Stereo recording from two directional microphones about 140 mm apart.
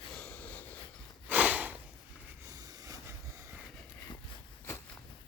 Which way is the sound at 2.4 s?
25° right (ahead or behind).